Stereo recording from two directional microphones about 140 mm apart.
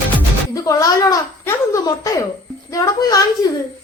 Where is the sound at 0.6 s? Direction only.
25° left (ahead or behind).